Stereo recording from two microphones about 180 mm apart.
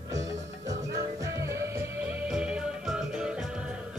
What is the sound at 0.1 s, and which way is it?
Music, 20° right (ahead or behind).